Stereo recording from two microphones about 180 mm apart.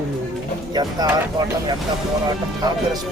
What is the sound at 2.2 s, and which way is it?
Speech, 20° right (ahead or behind).